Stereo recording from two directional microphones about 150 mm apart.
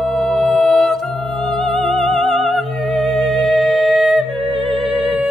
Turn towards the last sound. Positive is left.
turn(degrees=-35)  # may be behind; listen again after turning